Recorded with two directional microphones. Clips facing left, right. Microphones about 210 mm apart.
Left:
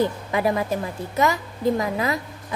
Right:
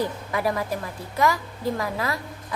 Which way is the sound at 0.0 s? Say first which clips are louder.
Left 4 dB; 20° left (ahead or behind).